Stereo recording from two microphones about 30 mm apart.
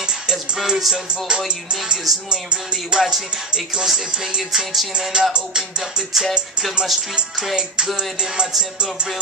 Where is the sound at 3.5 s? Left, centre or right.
Right.